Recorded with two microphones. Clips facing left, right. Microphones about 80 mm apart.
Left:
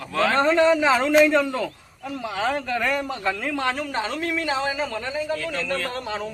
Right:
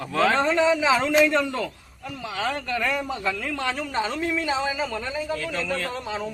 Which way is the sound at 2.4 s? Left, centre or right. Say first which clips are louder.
Left 3 dB; centre.